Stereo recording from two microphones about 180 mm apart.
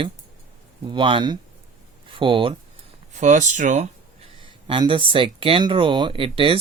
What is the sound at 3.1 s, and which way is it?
Speech, 45° right (ahead or behind).